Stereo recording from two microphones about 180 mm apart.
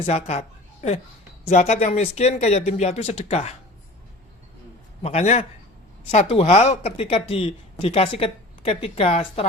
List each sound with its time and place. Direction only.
0.0 s a woman's voice: 35° left (ahead or behind)
5.0 s speech: 40° left (ahead or behind)